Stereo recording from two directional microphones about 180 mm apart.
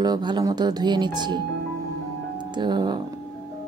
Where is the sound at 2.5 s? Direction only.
25° right (ahead or behind).